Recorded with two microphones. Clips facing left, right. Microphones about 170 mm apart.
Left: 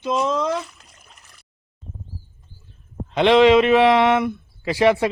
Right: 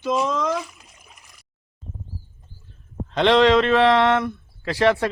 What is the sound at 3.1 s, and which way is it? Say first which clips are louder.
Speech: left 3 dB; 5° left (ahead or behind).